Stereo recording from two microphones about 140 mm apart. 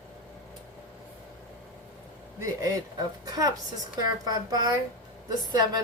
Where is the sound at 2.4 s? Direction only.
25° right (ahead or behind).